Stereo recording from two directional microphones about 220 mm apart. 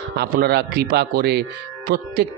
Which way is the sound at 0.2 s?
45° right (ahead or behind).